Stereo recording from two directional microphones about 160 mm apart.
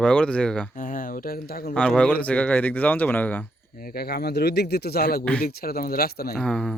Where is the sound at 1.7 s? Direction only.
5° left (ahead or behind).